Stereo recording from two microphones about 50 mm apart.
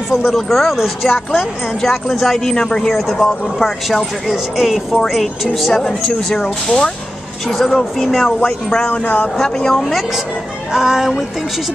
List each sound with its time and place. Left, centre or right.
0.1 s speech: centre
2.9 s speech: centre
7.4 s speech: centre
8.3 s speech: centre
8.8 s speech: left
9.4 s speech: centre
10.7 s music: centre